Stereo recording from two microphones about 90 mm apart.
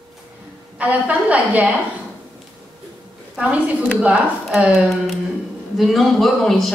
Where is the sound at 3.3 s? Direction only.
15° right (ahead or behind).